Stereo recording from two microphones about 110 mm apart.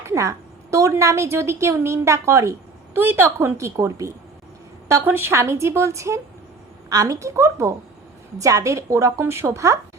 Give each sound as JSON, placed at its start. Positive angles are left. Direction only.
{"t": 0.1, "sound": "a woman's voice", "side_deg": -30}